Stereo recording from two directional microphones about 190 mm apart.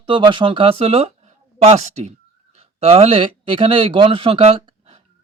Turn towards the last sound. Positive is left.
turn(degrees=-30)  # may be behind; listen again after turning